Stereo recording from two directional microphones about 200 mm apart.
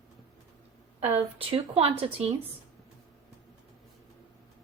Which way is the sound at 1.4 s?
30° right (ahead or behind).